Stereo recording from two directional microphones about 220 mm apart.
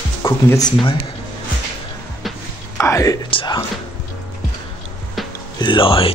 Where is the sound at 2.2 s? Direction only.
Centre (ahead or behind).